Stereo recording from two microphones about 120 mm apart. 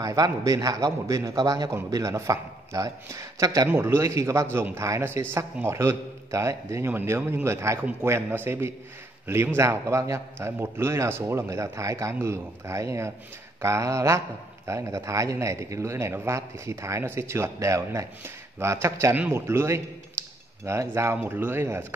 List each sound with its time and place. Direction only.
0.0 s speech: 30° right (ahead or behind)